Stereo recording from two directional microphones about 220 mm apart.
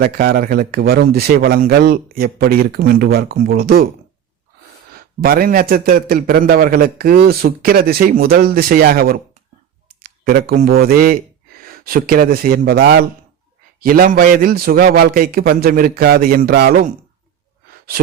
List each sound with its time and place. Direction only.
0.0 s a man's voice: 45° right (ahead or behind)
4.9 s a man's voice: 40° right (ahead or behind)